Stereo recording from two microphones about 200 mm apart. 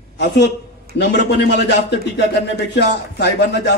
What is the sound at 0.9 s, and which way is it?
A man's voice, 60° left (ahead or behind).